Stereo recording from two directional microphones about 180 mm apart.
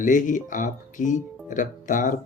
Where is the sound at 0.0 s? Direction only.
45° left (ahead or behind).